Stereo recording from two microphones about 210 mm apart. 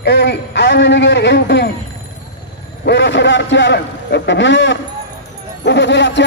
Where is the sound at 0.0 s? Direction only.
55° left (ahead or behind).